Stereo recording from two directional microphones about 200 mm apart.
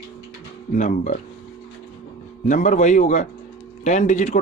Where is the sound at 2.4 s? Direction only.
40° left (ahead or behind).